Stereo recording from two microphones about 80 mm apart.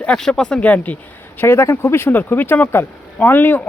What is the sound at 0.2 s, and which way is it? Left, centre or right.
Speech, centre.